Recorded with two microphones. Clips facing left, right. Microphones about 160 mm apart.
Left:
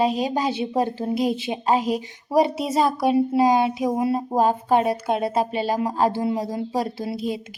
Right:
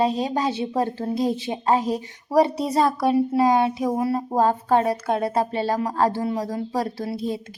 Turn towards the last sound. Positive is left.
turn(degrees=20)  # may be behind; listen again after turning